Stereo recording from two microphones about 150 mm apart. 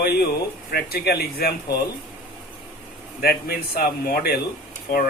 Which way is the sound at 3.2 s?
90° left.